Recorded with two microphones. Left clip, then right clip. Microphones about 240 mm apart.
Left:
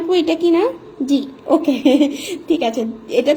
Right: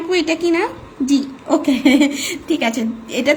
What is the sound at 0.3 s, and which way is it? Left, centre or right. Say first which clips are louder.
Speech: left 2 dB; right.